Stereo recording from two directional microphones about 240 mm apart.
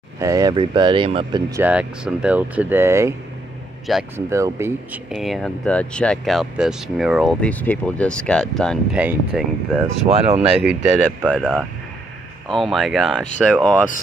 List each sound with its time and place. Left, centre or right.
0.2 s speech: centre
1.6 s speech: centre
3.9 s speech: centre
4.3 s speech: centre
5.1 s speech: centre
10.0 s speech: right
11.2 s speech: centre